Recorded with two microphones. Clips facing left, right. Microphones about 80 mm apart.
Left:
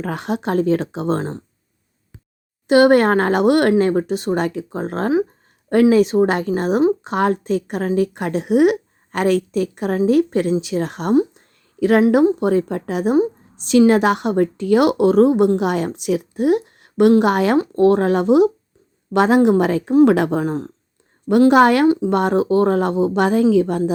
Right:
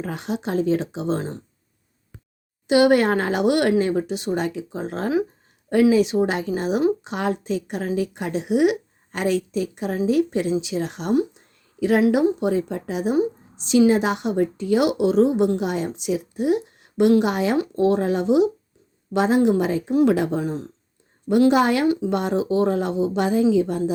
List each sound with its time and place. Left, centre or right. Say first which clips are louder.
0.0 s a woman's voice: left 4 dB; left
2.6 s a woman's voice: left 4 dB; left
11.3 s a sound: left 5 dB; left
12.4 s a woman's voice: left 4 dB; left
19.1 s a woman's voice: left 4 dB; left